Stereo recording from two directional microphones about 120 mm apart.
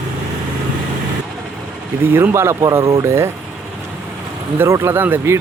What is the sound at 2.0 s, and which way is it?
Speech, 20° right (ahead or behind).